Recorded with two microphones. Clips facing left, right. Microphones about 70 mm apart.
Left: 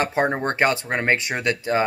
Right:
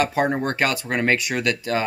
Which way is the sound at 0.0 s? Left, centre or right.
Left.